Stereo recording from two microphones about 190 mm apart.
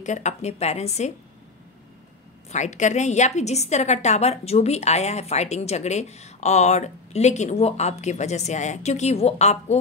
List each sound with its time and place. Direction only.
0.0 s a woman's voice: 40° left (ahead or behind)
2.5 s a woman's voice: 40° left (ahead or behind)